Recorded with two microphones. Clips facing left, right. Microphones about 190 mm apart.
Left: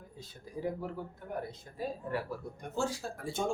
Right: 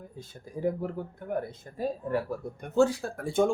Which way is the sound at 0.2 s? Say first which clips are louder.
Right 6 dB; 50° right (ahead or behind).